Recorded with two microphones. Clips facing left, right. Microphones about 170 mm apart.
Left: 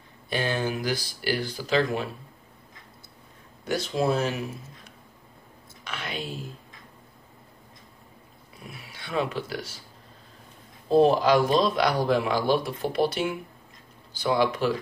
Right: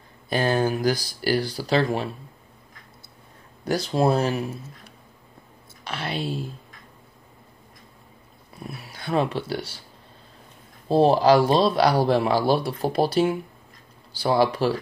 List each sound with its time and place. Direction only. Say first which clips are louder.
0.3 s speech: right 5 dB; 40° right (ahead or behind)
3.6 s speech: right 4 dB; 35° right (ahead or behind)
5.9 s speech: right 5 dB; 35° right (ahead or behind)
8.6 s speech: right 8 dB; 40° right (ahead or behind)
10.9 s speech: right 2 dB; 30° right (ahead or behind)